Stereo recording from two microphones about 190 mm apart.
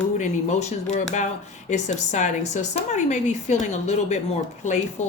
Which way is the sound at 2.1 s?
40° left (ahead or behind).